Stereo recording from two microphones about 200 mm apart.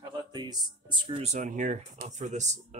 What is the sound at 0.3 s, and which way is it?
Speech, 20° right (ahead or behind).